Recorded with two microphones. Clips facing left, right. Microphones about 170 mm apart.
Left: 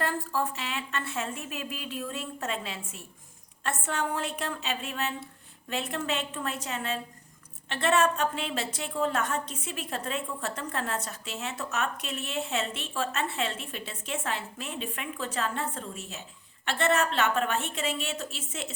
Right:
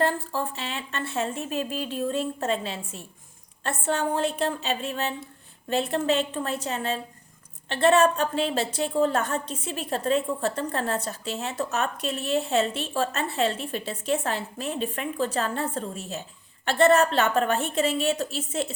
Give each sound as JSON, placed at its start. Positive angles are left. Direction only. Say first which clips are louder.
{"t": 0.0, "sound": "a woman's voice", "louder": "right 4 dB", "side_deg": -30}